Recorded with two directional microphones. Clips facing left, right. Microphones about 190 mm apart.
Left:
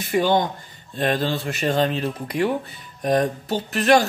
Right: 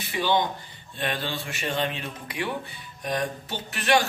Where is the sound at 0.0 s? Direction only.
45° left (ahead or behind).